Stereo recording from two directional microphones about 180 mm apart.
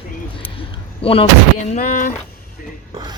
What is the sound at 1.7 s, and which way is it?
Speech, 50° left (ahead or behind).